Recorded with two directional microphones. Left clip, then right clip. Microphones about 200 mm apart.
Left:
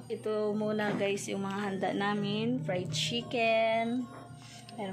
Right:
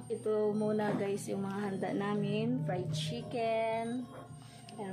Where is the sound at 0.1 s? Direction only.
15° left (ahead or behind).